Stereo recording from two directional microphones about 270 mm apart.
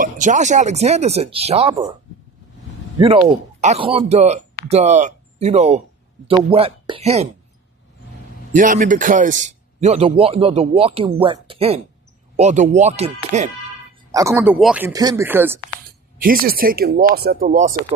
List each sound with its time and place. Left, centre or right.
0.0 s a man's voice: right
3.0 s a man's voice: right
8.5 s a man's voice: right
14.1 s speech: centre
16.2 s speech: right